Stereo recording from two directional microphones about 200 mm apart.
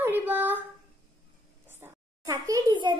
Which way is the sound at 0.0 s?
10° right (ahead or behind).